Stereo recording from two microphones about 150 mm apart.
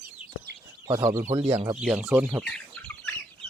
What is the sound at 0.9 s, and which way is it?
Speech, 20° right (ahead or behind).